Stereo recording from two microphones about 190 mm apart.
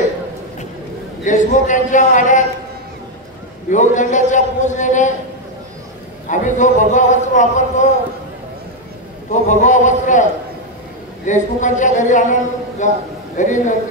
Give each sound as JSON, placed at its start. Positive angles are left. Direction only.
{"t": 1.2, "sound": "a woman's voice", "side_deg": 40}
{"t": 3.7, "sound": "a woman's voice", "side_deg": 40}
{"t": 6.2, "sound": "a woman's voice", "side_deg": 40}
{"t": 9.3, "sound": "a woman's voice", "side_deg": 40}
{"t": 11.2, "sound": "a woman's voice", "side_deg": 40}